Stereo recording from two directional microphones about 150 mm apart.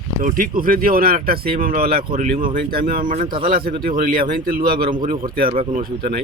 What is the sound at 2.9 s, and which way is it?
Speech, 60° right (ahead or behind).